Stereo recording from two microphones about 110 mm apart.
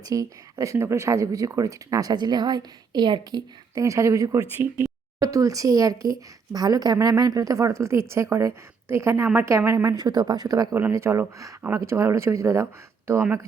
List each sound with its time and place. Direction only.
0.0 s speech: 30° right (ahead or behind)
4.5 s speech: 20° right (ahead or behind)
5.2 s speech: 30° right (ahead or behind)
10.8 s speech: 20° right (ahead or behind)